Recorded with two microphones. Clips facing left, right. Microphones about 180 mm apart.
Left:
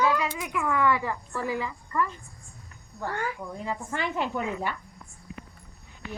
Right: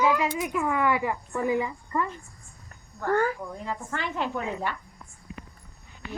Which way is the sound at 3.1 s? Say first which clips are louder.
Right 9 dB; 40° right (ahead or behind).